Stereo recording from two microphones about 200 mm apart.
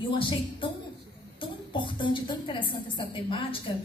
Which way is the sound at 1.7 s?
25° left (ahead or behind).